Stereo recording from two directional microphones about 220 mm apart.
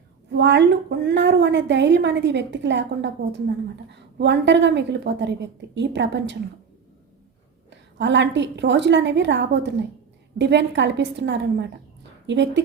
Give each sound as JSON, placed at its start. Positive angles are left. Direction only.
{"t": 0.3, "sound": "a woman's voice", "side_deg": -50}
{"t": 4.2, "sound": "a woman's voice", "side_deg": -50}
{"t": 7.7, "sound": "a woman's voice", "side_deg": -55}